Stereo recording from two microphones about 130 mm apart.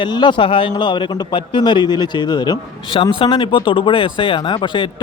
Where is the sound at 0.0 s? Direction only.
35° left (ahead or behind).